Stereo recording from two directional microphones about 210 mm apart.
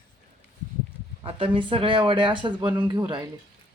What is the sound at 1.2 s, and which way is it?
Speech, 25° right (ahead or behind).